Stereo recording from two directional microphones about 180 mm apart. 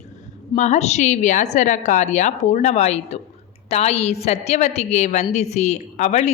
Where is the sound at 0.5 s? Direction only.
40° left (ahead or behind).